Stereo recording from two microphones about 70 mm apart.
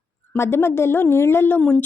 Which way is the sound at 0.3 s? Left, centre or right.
Left.